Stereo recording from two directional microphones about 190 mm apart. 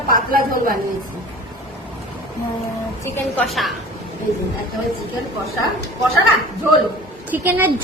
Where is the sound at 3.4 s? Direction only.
Centre (ahead or behind).